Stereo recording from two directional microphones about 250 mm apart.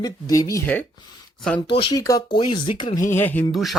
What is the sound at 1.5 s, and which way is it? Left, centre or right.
Speech, centre.